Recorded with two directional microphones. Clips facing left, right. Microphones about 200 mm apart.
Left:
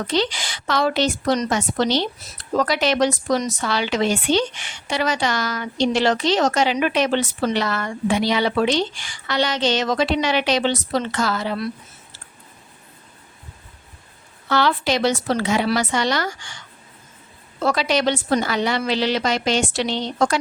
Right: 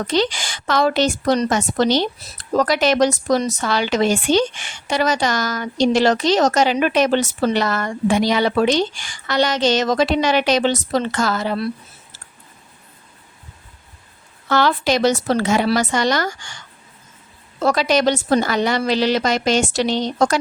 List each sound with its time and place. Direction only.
0.1 s a woman's voice: 45° right (ahead or behind)
14.5 s a woman's voice: 45° right (ahead or behind)
17.6 s a woman's voice: 40° right (ahead or behind)